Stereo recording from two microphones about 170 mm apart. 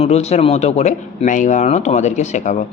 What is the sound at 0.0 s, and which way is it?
A man's voice, 40° left (ahead or behind).